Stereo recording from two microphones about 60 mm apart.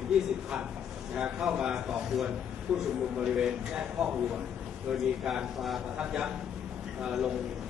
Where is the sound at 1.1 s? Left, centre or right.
Centre.